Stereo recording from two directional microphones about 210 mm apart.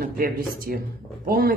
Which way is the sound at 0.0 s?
45° right (ahead or behind).